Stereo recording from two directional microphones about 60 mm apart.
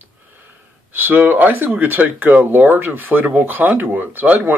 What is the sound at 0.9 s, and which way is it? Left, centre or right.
Speech, right.